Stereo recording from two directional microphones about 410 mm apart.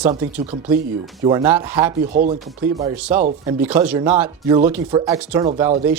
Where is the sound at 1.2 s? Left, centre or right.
Centre.